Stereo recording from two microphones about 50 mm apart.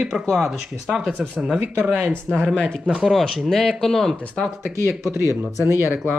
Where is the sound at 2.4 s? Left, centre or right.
Left.